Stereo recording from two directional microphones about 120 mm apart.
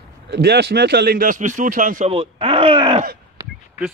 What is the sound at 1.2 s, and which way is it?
Speech, 90° right.